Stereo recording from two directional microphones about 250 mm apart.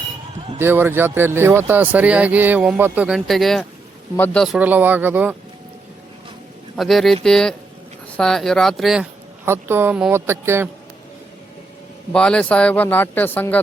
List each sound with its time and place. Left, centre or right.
0.6 s speech: centre
6.7 s speech: centre
12.1 s speech: centre